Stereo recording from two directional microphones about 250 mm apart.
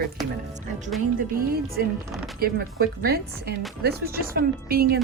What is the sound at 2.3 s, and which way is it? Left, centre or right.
Speech, right.